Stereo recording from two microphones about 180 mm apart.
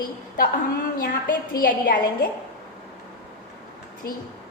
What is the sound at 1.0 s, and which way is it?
A woman's voice, 60° left (ahead or behind).